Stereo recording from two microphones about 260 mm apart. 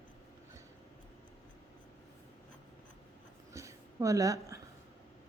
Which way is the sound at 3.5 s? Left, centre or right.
Centre.